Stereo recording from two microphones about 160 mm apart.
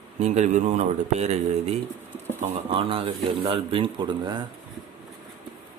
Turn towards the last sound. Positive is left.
turn(degrees=-30)  # may be behind; listen again after turning